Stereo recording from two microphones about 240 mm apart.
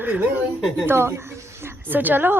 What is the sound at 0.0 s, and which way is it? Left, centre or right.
Speech, centre.